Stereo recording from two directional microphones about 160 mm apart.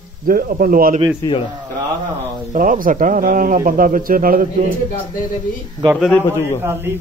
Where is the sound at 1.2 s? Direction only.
30° left (ahead or behind).